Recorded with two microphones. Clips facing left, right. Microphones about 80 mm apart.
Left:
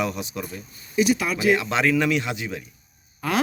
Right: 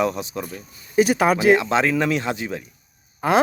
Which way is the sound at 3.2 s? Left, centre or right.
Right.